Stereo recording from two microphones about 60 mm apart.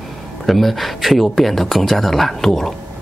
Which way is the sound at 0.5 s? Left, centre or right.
Centre.